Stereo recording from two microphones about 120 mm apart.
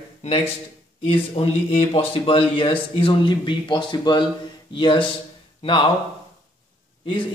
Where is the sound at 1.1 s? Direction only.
50° left (ahead or behind).